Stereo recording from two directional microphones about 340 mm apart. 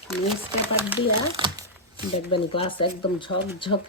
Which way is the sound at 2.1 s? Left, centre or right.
Centre.